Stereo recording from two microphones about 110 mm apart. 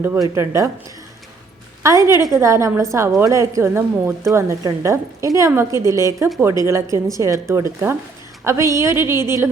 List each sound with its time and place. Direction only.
0.2 s a woman's voice: 30° right (ahead or behind)
1.8 s a woman's voice: 30° right (ahead or behind)